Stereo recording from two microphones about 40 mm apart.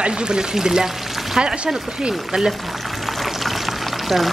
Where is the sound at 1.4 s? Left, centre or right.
Centre.